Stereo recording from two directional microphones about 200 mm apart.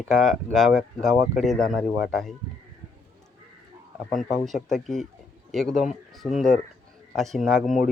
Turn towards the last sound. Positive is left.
turn(degrees=0)  # may be behind; listen again after turning